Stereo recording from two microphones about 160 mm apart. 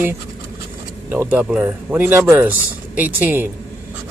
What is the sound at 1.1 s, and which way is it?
Speech, 10° right (ahead or behind).